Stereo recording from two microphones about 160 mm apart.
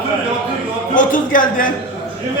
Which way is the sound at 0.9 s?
55° left (ahead or behind).